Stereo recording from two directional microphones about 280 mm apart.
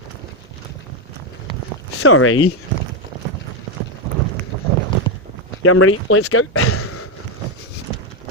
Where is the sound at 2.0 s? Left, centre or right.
Left.